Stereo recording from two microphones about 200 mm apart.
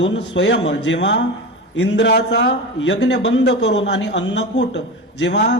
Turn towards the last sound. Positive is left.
turn(degrees=60)  # may be behind; listen again after turning